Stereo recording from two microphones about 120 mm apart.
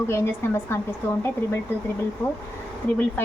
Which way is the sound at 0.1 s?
20° left (ahead or behind).